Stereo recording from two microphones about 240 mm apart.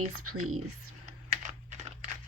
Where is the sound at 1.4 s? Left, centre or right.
Right.